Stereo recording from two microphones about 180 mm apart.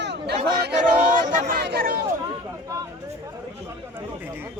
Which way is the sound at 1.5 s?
60° right (ahead or behind).